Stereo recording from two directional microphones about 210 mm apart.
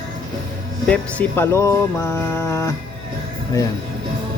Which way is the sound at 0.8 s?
10° left (ahead or behind).